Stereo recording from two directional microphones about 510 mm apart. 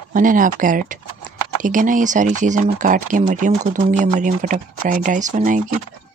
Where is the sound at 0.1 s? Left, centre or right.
Centre.